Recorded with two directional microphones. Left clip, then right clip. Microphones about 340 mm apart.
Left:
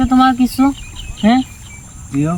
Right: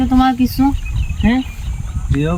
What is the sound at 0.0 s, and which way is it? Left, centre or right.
Speech, centre.